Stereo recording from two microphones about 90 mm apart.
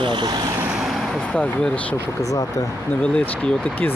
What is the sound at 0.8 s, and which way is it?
Speech, centre (ahead or behind).